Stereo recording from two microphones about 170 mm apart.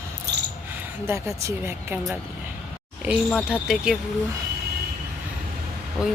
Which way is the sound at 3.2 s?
5° left (ahead or behind).